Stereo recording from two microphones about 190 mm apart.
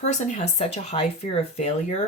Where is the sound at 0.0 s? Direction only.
40° left (ahead or behind).